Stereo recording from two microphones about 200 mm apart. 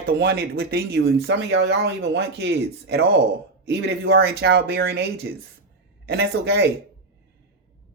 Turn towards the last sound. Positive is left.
turn(degrees=-55)  # may be behind; listen again after turning